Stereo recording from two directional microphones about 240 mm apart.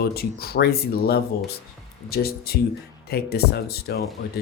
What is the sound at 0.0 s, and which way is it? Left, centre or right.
Speech, left.